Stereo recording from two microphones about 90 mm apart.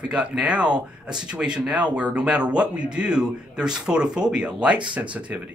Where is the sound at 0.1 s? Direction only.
10° right (ahead or behind).